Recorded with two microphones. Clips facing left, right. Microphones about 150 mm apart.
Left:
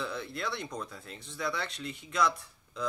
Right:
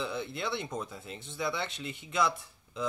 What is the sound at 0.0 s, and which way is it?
Speech, centre (ahead or behind).